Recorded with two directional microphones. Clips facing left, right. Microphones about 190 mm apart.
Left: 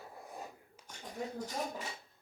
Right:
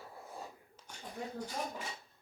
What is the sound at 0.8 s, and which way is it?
Dishes, 10° left (ahead or behind).